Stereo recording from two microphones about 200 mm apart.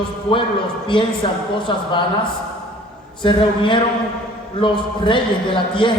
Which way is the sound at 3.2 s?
25° left (ahead or behind).